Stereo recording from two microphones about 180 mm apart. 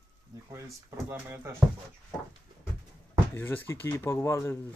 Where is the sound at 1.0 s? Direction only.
15° right (ahead or behind).